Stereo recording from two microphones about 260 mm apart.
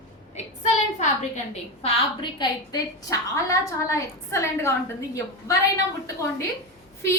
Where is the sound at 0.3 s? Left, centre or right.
Left.